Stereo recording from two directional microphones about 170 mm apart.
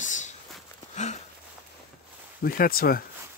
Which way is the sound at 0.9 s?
45° left (ahead or behind).